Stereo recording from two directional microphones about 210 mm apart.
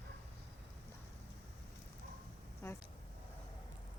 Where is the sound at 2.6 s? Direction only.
10° left (ahead or behind).